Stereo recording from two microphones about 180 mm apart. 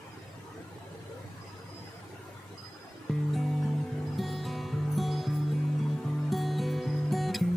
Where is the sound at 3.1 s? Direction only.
Centre (ahead or behind).